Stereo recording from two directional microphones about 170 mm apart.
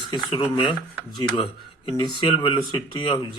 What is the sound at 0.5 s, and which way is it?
Speech, 30° left (ahead or behind).